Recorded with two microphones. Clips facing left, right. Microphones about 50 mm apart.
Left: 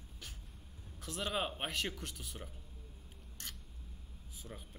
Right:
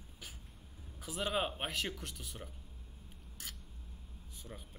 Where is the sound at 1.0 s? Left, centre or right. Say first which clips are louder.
Right 2 dB; centre.